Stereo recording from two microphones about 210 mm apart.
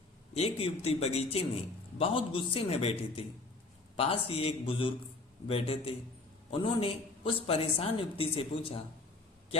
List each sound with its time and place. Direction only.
0.3 s a woman's voice: 30° left (ahead or behind)